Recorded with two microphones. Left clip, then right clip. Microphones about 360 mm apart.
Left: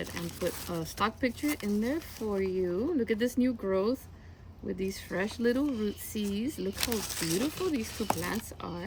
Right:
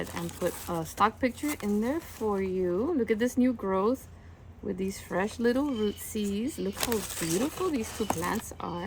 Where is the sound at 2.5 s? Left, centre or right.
Right.